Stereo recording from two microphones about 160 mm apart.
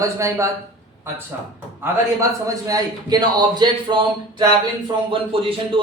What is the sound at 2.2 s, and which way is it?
A man's voice, 20° right (ahead or behind).